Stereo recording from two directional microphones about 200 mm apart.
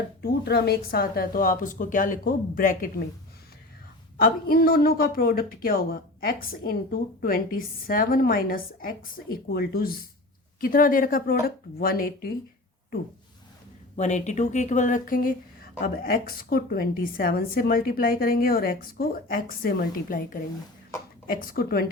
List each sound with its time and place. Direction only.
0.2 s a woman's voice: 55° left (ahead or behind)
4.2 s a woman's voice: 50° left (ahead or behind)
13.9 s a woman's voice: 35° left (ahead or behind)